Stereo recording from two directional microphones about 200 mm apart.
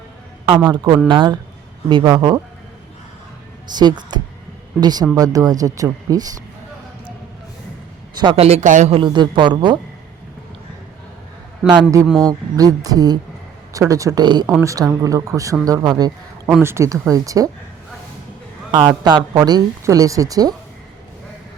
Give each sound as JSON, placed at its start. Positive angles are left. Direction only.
{"t": 0.4, "sound": "speech", "side_deg": -25}
{"t": 3.7, "sound": "speech", "side_deg": -20}
{"t": 8.1, "sound": "speech", "side_deg": -20}
{"t": 11.7, "sound": "speech", "side_deg": -20}
{"t": 12.0, "sound": "speech", "side_deg": 0}
{"t": 12.3, "sound": "speech", "side_deg": -20}
{"t": 18.7, "sound": "speech", "side_deg": -20}